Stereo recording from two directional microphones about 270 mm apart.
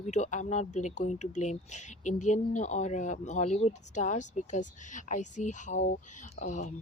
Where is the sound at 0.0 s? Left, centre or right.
Left.